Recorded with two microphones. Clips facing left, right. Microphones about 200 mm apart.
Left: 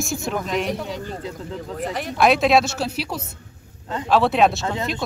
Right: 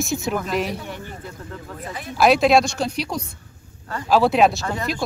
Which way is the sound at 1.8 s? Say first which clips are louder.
Left 7 dB; 75° left (ahead or behind).